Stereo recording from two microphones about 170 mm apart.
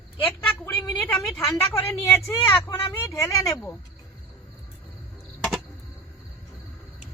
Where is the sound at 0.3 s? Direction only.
10° left (ahead or behind).